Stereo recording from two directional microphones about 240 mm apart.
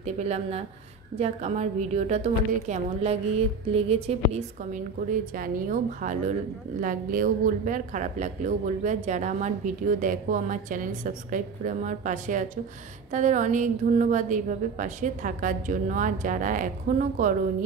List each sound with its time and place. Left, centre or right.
0.0 s a woman's voice: right